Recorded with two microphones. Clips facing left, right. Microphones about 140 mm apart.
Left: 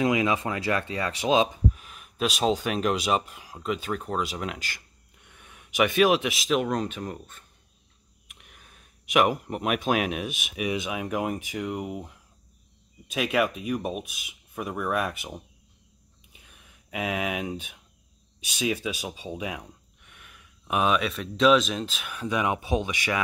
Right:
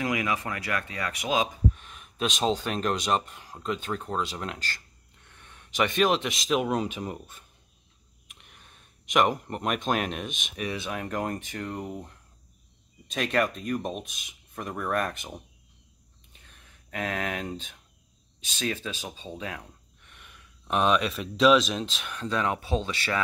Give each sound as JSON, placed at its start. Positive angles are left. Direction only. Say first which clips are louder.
{"t": 0.0, "sound": "speech", "louder": "left 5 dB", "side_deg": 25}
{"t": 1.7, "sound": "speech", "louder": "left 1 dB", "side_deg": 5}
{"t": 8.3, "sound": "speech", "louder": "left 1 dB", "side_deg": 0}
{"t": 16.3, "sound": "a sound", "louder": "left 1 dB", "side_deg": 10}
{"t": 18.4, "sound": "speech", "louder": "left 4 dB", "side_deg": 10}